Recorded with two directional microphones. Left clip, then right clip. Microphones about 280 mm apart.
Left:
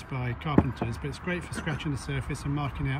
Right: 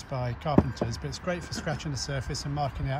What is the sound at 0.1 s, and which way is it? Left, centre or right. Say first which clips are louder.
Speech: right 1 dB; centre.